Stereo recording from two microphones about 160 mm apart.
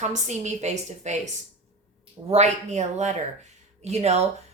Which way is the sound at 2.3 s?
45° right (ahead or behind).